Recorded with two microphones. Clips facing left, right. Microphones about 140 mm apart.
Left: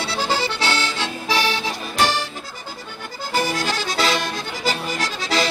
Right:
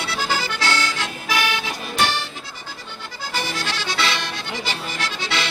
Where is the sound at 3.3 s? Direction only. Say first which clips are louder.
Left 5 dB; 45° left (ahead or behind).